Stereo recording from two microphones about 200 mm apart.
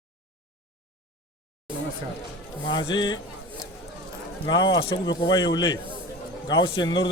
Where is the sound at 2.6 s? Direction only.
20° left (ahead or behind).